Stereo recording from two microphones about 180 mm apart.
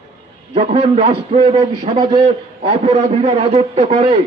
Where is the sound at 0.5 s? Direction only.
35° right (ahead or behind).